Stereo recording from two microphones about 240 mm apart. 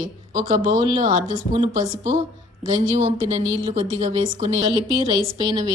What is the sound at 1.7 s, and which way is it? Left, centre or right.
A woman's voice, right.